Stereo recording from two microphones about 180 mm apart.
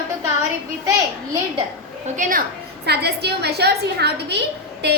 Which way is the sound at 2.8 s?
65° right (ahead or behind).